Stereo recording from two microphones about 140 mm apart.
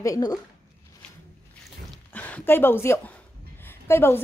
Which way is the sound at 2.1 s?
10° left (ahead or behind).